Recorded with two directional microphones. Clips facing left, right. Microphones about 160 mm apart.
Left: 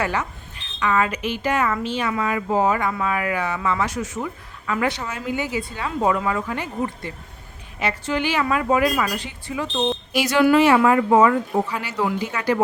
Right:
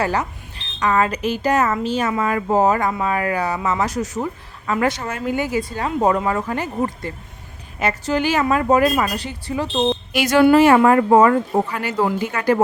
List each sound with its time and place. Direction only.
0.0 s speech: 35° right (ahead or behind)
10.1 s speech: 55° right (ahead or behind)